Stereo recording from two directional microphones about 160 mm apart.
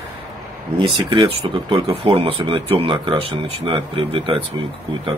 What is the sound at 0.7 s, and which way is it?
Speech, 30° right (ahead or behind).